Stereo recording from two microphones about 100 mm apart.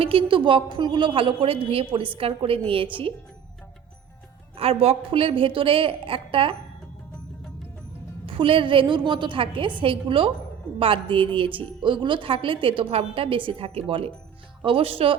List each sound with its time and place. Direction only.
0.0 s a woman's voice: 65° right (ahead or behind)
4.5 s a woman's voice: 70° right (ahead or behind)
8.3 s a woman's voice: 60° right (ahead or behind)